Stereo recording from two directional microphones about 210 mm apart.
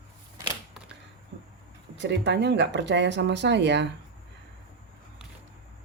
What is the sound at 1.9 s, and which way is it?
Speech, 55° right (ahead or behind).